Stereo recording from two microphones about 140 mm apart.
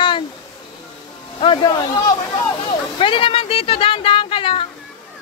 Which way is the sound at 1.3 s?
35° left (ahead or behind).